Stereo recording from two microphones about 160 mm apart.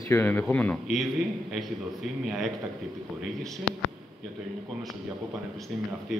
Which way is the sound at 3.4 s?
Centre (ahead or behind).